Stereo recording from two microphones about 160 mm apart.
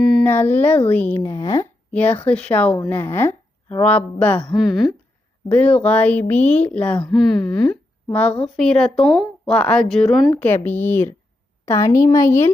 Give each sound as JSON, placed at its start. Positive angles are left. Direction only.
{"t": 0.0, "sound": "a sound", "side_deg": 0}
{"t": 0.3, "sound": "speech", "side_deg": 15}
{"t": 1.2, "sound": "a woman's voice", "side_deg": 25}
{"t": 1.9, "sound": "speech", "side_deg": 10}
{"t": 6.4, "sound": "speech", "side_deg": 45}
{"t": 6.7, "sound": "a woman's voice", "side_deg": 10}
{"t": 10.3, "sound": "a woman's voice", "side_deg": 10}